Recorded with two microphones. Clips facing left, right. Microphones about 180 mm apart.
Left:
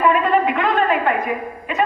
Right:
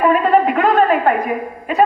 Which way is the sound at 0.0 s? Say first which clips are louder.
Right 3 dB; 40° right (ahead or behind).